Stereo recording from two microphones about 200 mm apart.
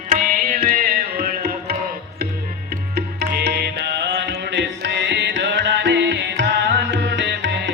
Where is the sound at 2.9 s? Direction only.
55° right (ahead or behind).